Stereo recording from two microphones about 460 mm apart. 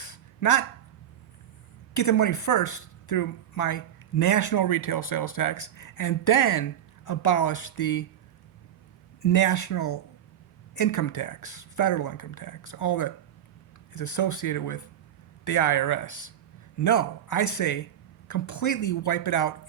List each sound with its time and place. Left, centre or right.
0.0 s a sound: left
1.9 s speech: left
9.2 s speech: left